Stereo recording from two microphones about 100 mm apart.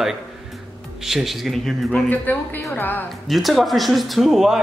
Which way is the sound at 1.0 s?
Centre (ahead or behind).